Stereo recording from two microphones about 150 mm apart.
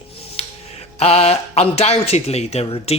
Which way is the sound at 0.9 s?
45° left (ahead or behind).